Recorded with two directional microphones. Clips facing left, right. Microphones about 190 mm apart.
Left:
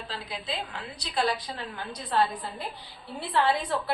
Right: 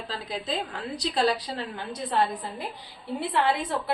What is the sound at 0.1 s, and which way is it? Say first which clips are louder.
A woman's voice: right 5 dB; 40° right (ahead or behind).